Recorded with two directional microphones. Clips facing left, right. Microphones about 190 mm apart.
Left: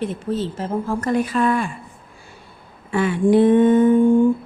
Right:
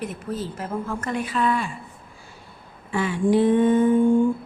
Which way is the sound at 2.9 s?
60° left (ahead or behind).